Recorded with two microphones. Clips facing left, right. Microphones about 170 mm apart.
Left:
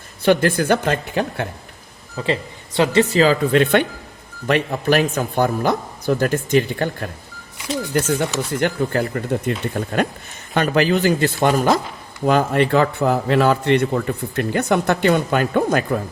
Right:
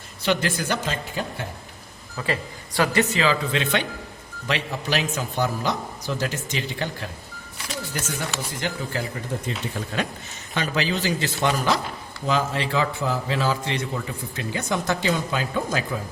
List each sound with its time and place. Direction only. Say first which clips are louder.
0.2 s a man's voice: left 8 dB; 50° left (ahead or behind)
2.1 s a man's voice: left 5 dB; 25° left (ahead or behind); by 16.0 s 60° left (ahead or behind)